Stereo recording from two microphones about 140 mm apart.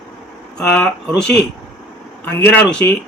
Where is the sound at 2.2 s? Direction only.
10° left (ahead or behind).